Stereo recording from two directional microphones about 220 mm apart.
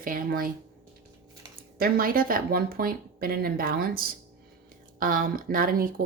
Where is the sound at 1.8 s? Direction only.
40° right (ahead or behind).